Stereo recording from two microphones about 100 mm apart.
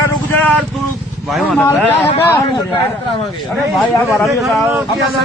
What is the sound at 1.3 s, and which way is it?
Speech, centre (ahead or behind).